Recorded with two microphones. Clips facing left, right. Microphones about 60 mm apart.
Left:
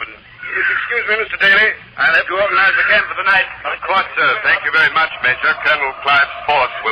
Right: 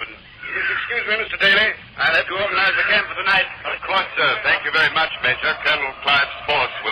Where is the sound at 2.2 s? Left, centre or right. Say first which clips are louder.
Left 6 dB; left.